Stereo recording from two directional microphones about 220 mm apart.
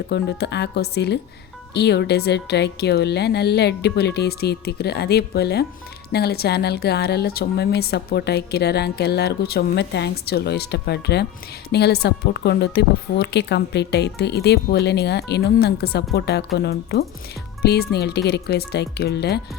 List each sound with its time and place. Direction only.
0.1 s speech: 50° left (ahead or behind)